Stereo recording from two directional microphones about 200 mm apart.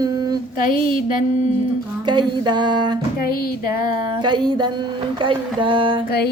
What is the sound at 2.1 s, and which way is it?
Speech, 20° right (ahead or behind).